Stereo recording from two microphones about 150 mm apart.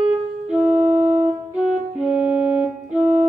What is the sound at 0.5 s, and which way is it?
Music, centre (ahead or behind).